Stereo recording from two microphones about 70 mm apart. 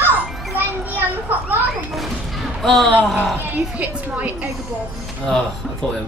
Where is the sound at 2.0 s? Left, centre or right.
Centre.